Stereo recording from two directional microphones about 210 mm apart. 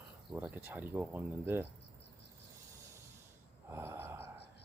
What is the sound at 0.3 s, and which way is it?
Speech, 10° right (ahead or behind).